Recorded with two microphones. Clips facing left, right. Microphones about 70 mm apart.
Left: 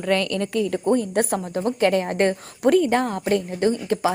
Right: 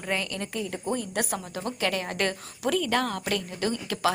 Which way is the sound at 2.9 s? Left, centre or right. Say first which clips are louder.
Left 6 dB; left.